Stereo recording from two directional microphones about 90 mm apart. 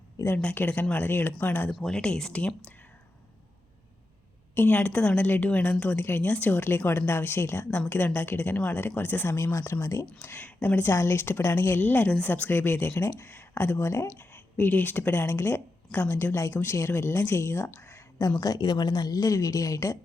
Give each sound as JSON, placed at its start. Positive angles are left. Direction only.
{"t": 0.4, "sound": "speech", "side_deg": 15}
{"t": 1.7, "sound": "a woman's voice", "side_deg": 5}
{"t": 4.5, "sound": "a woman's voice", "side_deg": 20}
{"t": 10.2, "sound": "speech", "side_deg": 20}
{"t": 14.2, "sound": "speech", "side_deg": 20}
{"t": 18.4, "sound": "speech", "side_deg": 50}